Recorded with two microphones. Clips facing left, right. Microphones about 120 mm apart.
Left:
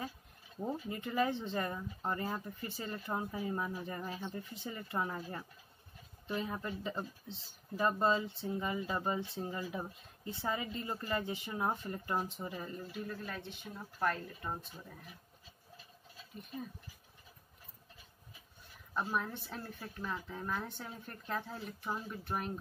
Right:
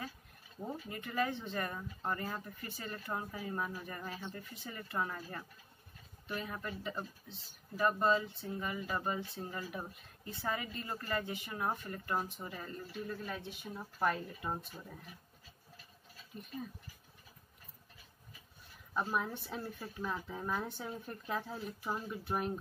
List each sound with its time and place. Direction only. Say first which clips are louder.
0.8 s speech: left 2 dB; 25° left (ahead or behind)
13.0 s speech: right 3 dB; centre (ahead or behind)
19.0 s speech: right 1 dB; 5° right (ahead or behind)